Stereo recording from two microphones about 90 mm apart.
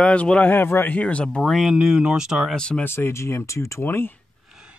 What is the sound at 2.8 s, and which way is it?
Speech, 25° left (ahead or behind).